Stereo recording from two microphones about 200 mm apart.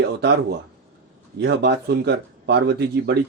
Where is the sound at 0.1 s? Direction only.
60° right (ahead or behind).